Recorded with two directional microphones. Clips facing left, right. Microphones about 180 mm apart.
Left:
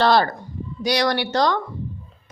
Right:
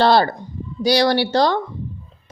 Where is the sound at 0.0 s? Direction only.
30° right (ahead or behind).